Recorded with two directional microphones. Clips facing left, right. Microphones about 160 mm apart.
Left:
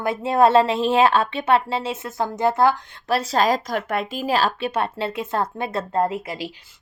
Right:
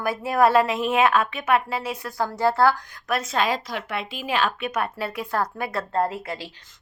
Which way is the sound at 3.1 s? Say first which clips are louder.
Left 4 dB; 35° left (ahead or behind).